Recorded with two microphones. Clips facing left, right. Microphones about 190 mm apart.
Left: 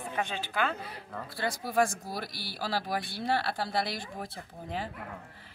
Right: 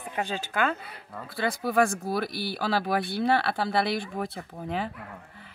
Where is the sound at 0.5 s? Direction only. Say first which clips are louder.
Right 4 dB; 50° right (ahead or behind).